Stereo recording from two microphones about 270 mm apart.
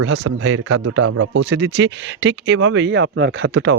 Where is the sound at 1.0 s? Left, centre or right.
Right.